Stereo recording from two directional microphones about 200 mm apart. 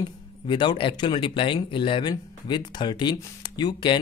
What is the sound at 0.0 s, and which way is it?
Speech, 25° left (ahead or behind).